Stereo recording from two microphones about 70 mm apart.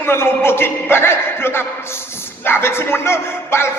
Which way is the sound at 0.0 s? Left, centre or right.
Left.